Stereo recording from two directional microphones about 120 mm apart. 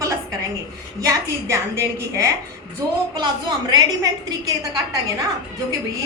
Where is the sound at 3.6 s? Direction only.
30° right (ahead or behind).